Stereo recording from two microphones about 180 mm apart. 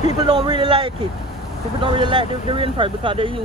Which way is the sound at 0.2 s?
25° right (ahead or behind).